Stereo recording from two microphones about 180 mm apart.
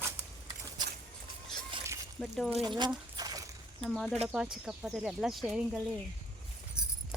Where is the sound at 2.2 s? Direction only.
Centre (ahead or behind).